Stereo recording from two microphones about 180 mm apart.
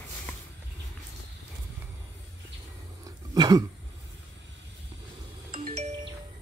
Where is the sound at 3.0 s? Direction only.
20° right (ahead or behind).